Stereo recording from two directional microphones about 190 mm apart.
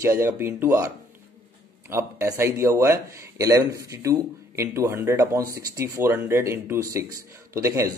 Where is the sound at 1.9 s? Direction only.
15° right (ahead or behind).